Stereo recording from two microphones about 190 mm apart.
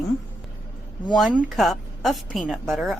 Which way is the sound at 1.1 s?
5° right (ahead or behind).